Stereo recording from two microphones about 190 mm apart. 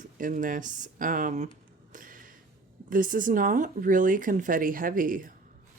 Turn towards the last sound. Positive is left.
turn(degrees=-45)  # may be behind; listen again after turning